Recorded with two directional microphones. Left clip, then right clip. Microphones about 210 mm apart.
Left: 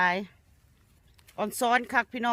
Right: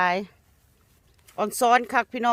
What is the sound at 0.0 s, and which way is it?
Speech, 25° right (ahead or behind).